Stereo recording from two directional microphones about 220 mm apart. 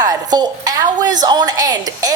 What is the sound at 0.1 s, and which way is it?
A woman's voice, 15° right (ahead or behind).